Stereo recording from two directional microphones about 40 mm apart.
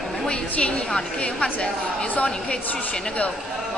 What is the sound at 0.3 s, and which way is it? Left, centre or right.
A woman's voice, left.